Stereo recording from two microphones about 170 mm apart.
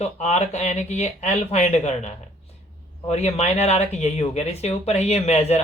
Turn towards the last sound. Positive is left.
turn(degrees=40)  # may be behind; listen again after turning